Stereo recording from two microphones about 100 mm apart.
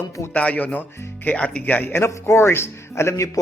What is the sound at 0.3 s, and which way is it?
Speech, 15° left (ahead or behind).